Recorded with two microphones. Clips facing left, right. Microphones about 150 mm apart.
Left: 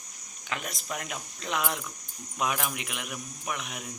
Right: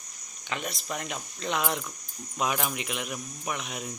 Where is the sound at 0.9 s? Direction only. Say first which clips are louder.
Left 1 dB; 5° left (ahead or behind).